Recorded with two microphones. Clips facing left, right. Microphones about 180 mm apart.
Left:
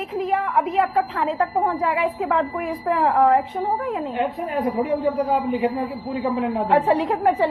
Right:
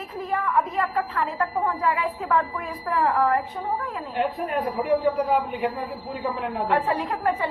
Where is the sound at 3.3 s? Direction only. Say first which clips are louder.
Left 5 dB; 90° left.